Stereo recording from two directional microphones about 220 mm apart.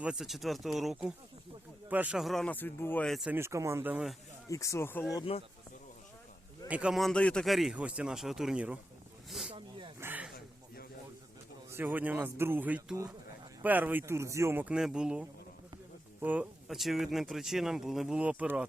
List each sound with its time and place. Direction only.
0.0 s speech: 5° right (ahead or behind)
4.4 s speech: 15° left (ahead or behind)
5.1 s speech: 25° left (ahead or behind)
6.7 s speech: 5° right (ahead or behind)
9.5 s snake: 25° right (ahead or behind)
10.0 s a sound: 10° right (ahead or behind)
11.7 s speech: 10° right (ahead or behind)